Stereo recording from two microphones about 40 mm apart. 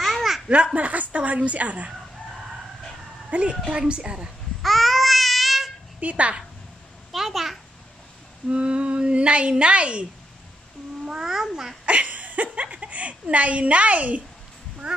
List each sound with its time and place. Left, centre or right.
0.0 s laughter: centre
0.7 s a woman's voice: right
3.3 s a woman's voice: right
3.6 s a woman's voice: right
4.6 s babbling: centre
5.9 s a woman's voice: right
7.1 s a child's voice: centre
8.5 s a woman's voice: right
11.1 s a child's voice: centre
11.8 s a sound: right
12.6 s speech: right